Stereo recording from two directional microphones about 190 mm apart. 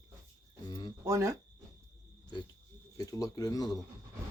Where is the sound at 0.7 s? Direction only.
20° left (ahead or behind).